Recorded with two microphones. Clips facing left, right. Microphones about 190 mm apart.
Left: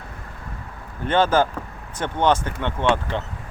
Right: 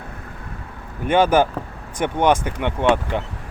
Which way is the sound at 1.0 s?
15° right (ahead or behind).